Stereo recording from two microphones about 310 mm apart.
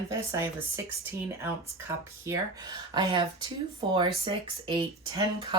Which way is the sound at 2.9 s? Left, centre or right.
Centre.